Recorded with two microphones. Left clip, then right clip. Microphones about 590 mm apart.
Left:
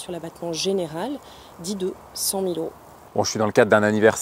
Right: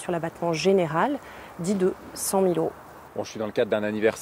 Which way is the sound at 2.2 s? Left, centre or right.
Right.